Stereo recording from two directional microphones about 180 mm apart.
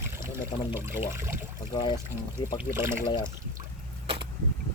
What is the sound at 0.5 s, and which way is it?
Speech, 25° left (ahead or behind).